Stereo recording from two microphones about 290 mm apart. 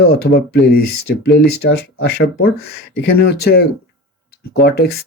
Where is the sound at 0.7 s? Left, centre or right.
Left.